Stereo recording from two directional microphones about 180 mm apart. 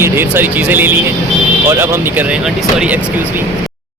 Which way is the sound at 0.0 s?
10° right (ahead or behind).